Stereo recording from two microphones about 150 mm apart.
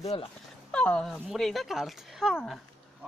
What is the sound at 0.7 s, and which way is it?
Speech, 5° left (ahead or behind).